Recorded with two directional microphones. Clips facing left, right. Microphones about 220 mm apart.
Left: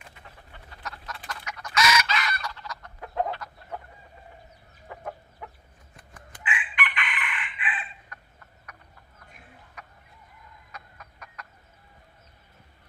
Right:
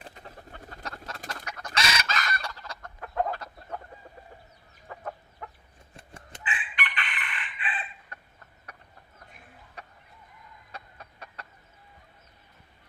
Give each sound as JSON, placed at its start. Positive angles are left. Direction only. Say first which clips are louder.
{"t": 0.0, "sound": "bird", "louder": "right 5 dB", "side_deg": -35}
{"t": 1.4, "sound": "chicken", "louder": "left 6 dB", "side_deg": -40}
{"t": 2.0, "sound": "chicken", "louder": "left 2 dB", "side_deg": -45}
{"t": 3.0, "sound": "chicken", "louder": "even", "side_deg": 15}
{"t": 6.0, "sound": "chicken", "louder": "right 1 dB", "side_deg": -25}
{"t": 9.8, "sound": "music", "louder": "right 2 dB", "side_deg": -30}
{"t": 10.7, "sound": "chicken", "louder": "right 2 dB", "side_deg": -30}